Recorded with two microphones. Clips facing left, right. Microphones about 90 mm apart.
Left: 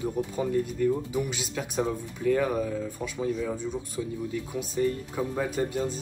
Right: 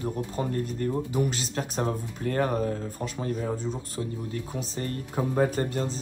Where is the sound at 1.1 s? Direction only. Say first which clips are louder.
Right 2 dB; 45° right (ahead or behind).